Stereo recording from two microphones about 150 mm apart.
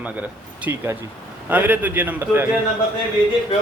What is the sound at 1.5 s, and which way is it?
Speech, 10° right (ahead or behind).